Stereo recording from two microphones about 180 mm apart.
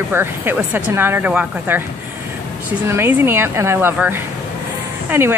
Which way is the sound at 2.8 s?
15° right (ahead or behind).